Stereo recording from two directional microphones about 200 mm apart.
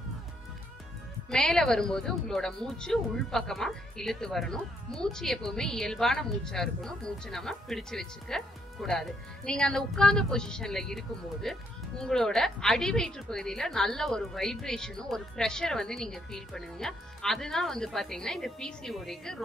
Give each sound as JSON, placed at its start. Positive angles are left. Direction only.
{"t": 1.3, "sound": "speech", "side_deg": 5}